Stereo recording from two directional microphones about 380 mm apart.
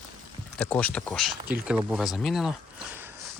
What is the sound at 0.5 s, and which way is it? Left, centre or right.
Speech, centre.